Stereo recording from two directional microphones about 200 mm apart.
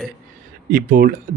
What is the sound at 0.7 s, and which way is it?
Speech, 45° right (ahead or behind).